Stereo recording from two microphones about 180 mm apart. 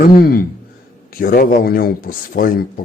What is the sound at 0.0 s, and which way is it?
Speech, 55° left (ahead or behind).